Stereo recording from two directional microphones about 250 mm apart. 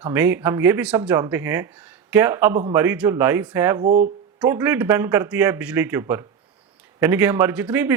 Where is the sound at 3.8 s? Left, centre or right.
Right.